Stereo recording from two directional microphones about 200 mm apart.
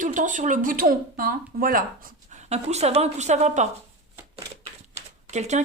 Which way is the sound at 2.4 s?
35° right (ahead or behind).